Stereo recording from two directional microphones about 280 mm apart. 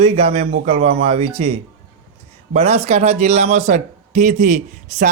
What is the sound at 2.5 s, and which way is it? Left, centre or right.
A man's voice, right.